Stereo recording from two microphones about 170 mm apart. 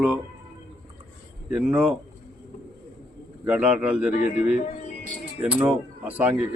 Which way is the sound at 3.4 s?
10° right (ahead or behind).